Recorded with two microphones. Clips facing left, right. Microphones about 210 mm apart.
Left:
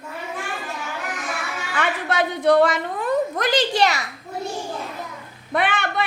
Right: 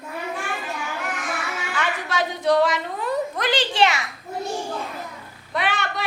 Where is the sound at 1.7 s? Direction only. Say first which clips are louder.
Left 4 dB; 55° left (ahead or behind); by 4.0 s 35° left (ahead or behind).